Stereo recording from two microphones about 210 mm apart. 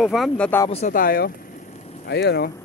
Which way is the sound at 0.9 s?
45° left (ahead or behind).